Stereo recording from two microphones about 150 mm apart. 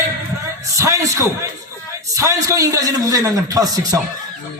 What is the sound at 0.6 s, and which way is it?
Music, 20° right (ahead or behind).